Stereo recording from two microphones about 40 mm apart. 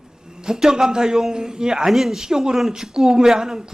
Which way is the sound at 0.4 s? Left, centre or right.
Centre.